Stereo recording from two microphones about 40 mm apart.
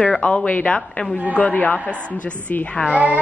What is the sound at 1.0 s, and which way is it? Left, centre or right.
Speech, left.